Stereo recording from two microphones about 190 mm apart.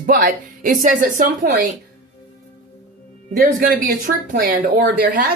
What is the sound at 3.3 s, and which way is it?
A woman's voice, 45° right (ahead or behind).